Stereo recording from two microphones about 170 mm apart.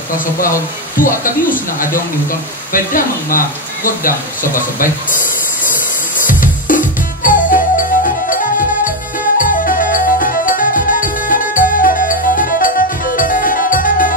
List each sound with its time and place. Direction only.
0.2 s speech: 55° left (ahead or behind)
6.4 s music: 50° left (ahead or behind)